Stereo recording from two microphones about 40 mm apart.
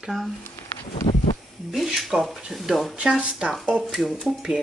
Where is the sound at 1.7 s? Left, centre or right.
Centre.